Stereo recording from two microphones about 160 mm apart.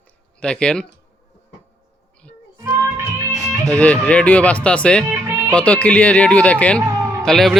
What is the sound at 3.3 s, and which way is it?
Music, 20° right (ahead or behind).